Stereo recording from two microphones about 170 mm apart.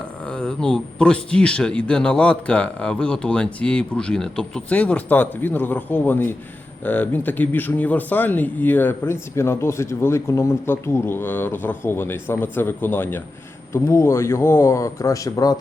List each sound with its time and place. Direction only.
0.3 s speech: 5° left (ahead or behind)